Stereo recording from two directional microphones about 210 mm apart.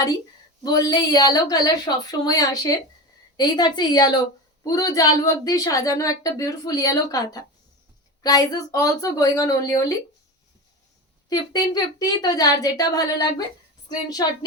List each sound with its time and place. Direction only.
0.6 s a woman's voice: 20° left (ahead or behind)
11.3 s a woman's voice: 15° left (ahead or behind)